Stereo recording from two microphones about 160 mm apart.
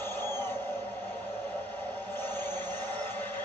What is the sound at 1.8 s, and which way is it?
Vehicle, 10° left (ahead or behind).